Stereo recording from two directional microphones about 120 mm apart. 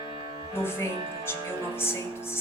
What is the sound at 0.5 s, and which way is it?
Speech, 20° left (ahead or behind).